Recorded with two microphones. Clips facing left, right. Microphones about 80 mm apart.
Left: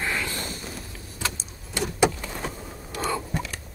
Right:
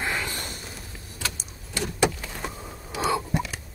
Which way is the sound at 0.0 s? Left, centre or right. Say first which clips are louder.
Even; right.